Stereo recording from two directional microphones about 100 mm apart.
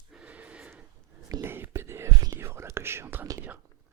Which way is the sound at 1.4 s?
25° right (ahead or behind).